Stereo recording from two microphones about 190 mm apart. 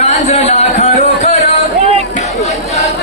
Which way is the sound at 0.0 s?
35° left (ahead or behind).